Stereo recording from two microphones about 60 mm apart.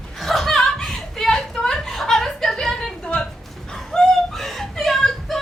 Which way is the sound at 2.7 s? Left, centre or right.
Centre.